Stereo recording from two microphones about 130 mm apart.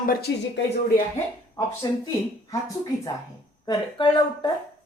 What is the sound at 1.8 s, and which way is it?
Speech, 35° left (ahead or behind).